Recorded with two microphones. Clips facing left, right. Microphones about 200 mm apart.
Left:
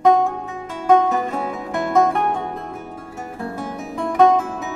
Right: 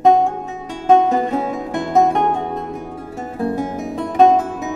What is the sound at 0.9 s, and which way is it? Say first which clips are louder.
Music: right 3 dB; 20° right (ahead or behind).